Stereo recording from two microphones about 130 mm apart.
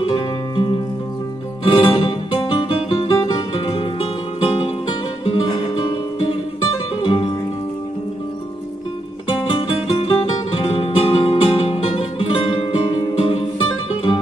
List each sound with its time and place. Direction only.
0.1 s music: 40° left (ahead or behind)
9.8 s music: 45° left (ahead or behind)